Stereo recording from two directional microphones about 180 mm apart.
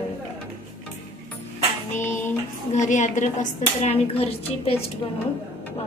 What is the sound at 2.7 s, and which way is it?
Speech, 40° left (ahead or behind).